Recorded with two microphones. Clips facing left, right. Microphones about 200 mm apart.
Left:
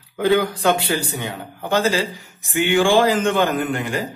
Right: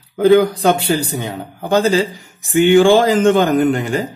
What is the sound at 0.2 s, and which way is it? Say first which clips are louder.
A man's voice: right 7 dB; 40° right (ahead or behind).